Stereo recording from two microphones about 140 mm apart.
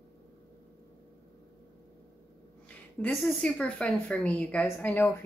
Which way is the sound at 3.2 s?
5° left (ahead or behind).